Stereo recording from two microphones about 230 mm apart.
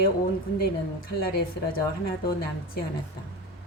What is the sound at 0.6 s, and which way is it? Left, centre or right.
Speech, left.